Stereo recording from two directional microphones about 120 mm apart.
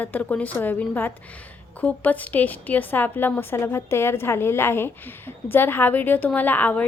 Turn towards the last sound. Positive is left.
turn(degrees=15)  # may be behind; listen again after turning